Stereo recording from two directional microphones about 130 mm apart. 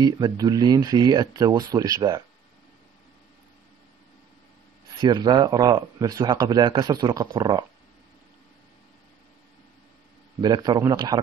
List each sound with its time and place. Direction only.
0.0 s speech: 30° right (ahead or behind)
5.0 s speech: 35° right (ahead or behind)
10.4 s a man's voice: 35° right (ahead or behind)